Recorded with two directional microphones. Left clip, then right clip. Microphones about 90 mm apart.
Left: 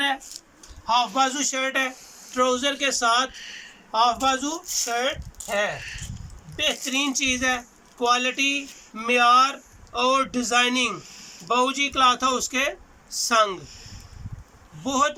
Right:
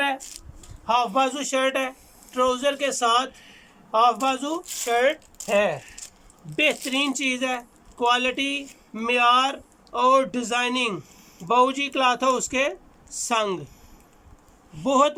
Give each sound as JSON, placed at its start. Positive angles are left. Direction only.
{"t": 0.9, "sound": "a man's voice", "side_deg": -25}
{"t": 3.4, "sound": "a sound", "side_deg": -15}
{"t": 3.9, "sound": "speech", "side_deg": -35}
{"t": 6.6, "sound": "speech", "side_deg": -55}
{"t": 7.0, "sound": "speech", "side_deg": -40}
{"t": 11.5, "sound": "speech", "side_deg": -40}
{"t": 14.8, "sound": "a man's voice", "side_deg": -40}